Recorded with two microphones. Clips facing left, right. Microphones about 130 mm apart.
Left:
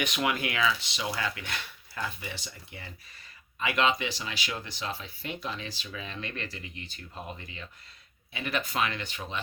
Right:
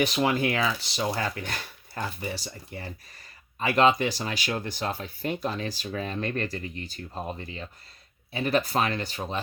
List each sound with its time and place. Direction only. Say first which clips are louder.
0.0 s speech: right 6 dB; 35° right (ahead or behind)